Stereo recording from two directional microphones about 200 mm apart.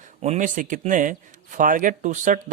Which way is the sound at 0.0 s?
35° right (ahead or behind).